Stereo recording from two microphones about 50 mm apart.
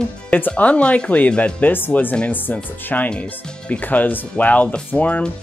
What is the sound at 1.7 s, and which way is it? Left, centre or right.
Speech, left.